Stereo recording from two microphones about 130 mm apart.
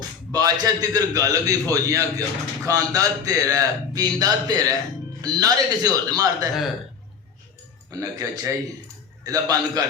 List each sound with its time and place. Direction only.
0.3 s a man's voice: 30° right (ahead or behind)
7.9 s a man's voice: 25° right (ahead or behind)